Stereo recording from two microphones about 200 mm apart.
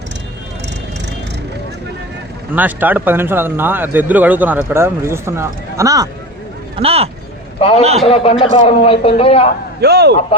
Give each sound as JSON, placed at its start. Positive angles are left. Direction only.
{"t": 2.5, "sound": "speech", "side_deg": -10}
{"t": 6.7, "sound": "speech", "side_deg": -30}
{"t": 7.6, "sound": "a man's voice", "side_deg": 30}
{"t": 9.8, "sound": "speech", "side_deg": -55}